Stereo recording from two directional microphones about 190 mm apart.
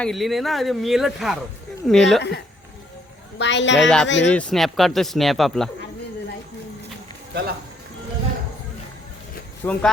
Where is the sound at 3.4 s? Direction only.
70° left (ahead or behind).